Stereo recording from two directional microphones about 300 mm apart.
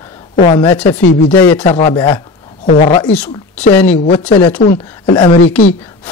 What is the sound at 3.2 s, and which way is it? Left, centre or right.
Speech, centre.